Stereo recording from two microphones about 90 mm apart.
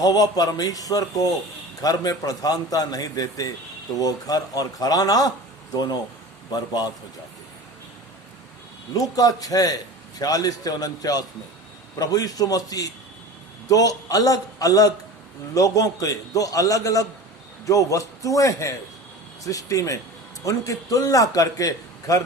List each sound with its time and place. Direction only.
0.0 s a man's voice: 45° left (ahead or behind)
9.0 s a man's voice: 45° left (ahead or behind)